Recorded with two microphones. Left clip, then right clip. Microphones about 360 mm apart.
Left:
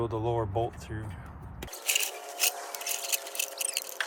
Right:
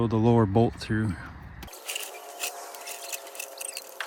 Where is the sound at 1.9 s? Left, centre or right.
Centre.